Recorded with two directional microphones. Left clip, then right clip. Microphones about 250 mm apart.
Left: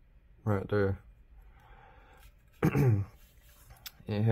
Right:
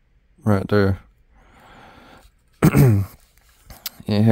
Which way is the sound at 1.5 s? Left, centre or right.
Right.